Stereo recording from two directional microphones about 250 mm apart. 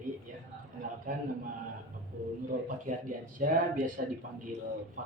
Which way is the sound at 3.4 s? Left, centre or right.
Right.